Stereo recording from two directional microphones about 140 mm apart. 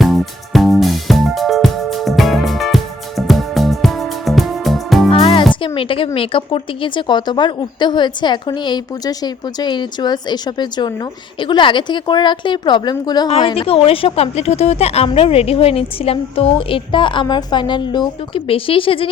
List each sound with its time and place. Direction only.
0.0 s music: centre (ahead or behind)
5.1 s music: 40° left (ahead or behind)
6.1 s a woman's voice: 40° left (ahead or behind)